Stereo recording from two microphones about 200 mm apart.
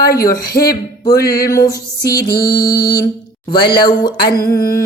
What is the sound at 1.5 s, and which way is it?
Music, 15° left (ahead or behind).